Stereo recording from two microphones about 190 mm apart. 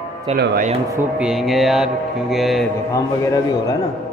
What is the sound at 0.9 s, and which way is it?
Mantra, 5° right (ahead or behind).